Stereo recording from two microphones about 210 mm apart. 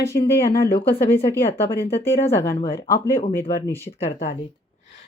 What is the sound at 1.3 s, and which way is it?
Speech, 10° left (ahead or behind).